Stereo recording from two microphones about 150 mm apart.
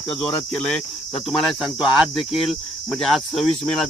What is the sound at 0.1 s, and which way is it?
Cricket, 5° left (ahead or behind).